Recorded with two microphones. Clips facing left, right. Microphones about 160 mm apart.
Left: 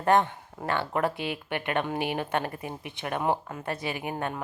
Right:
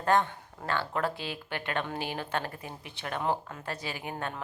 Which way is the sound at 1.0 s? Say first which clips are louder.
Left 4 dB; 60° left (ahead or behind).